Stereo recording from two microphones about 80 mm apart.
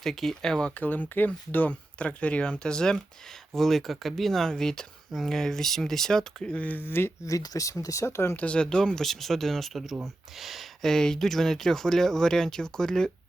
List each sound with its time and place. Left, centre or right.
0.0 s speech: centre; by 7.1 s left
7.3 s speech: left
8.4 s speech: centre